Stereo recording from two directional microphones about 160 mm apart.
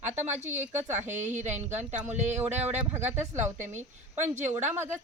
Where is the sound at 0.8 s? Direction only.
50° right (ahead or behind).